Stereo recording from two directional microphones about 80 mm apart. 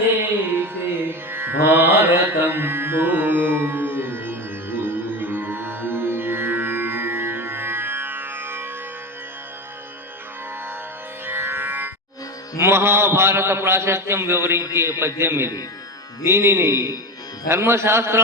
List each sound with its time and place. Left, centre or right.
0.5 s music: right
11.3 s music: right
12.5 s a man's voice: right